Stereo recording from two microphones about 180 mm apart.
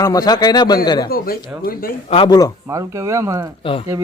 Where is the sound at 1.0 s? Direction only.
55° left (ahead or behind).